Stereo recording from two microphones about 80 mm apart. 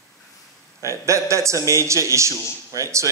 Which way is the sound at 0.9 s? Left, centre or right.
Right.